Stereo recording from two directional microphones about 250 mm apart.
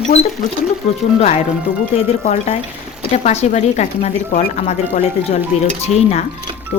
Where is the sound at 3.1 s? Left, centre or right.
Left.